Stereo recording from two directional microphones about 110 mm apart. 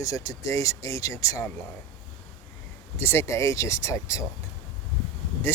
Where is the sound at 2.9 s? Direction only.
20° left (ahead or behind).